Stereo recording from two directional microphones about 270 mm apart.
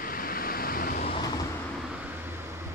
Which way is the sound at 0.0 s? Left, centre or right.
Left.